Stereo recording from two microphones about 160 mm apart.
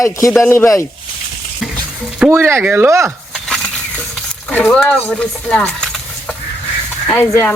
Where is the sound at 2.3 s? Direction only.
15° right (ahead or behind).